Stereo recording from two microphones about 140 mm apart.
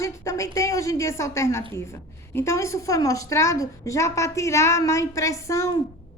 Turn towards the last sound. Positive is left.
turn(degrees=20)  # may be behind; listen again after turning